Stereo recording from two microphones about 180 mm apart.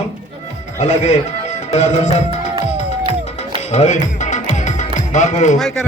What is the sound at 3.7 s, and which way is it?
Music, 40° left (ahead or behind).